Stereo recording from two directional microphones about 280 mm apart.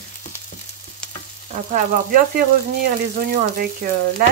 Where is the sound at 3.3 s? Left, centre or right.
Right.